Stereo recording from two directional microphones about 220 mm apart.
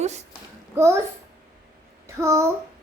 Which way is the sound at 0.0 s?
30° right (ahead or behind).